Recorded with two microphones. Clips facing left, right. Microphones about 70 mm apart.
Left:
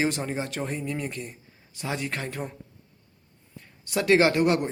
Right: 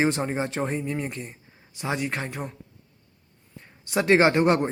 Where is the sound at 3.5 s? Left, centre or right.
Right.